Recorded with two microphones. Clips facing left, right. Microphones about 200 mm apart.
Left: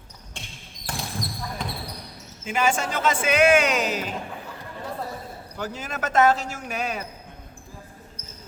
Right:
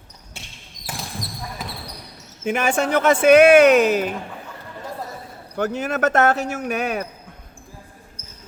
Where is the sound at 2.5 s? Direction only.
60° right (ahead or behind).